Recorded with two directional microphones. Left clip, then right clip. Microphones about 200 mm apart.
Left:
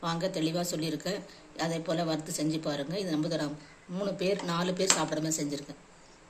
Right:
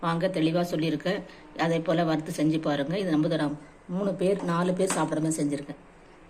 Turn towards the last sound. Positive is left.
turn(degrees=-5)  # may be behind; listen again after turning